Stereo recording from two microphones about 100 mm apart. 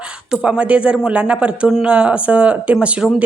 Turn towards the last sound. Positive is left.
turn(degrees=-10)  # may be behind; listen again after turning